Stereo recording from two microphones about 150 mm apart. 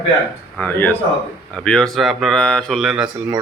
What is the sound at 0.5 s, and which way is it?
Speech, 10° left (ahead or behind).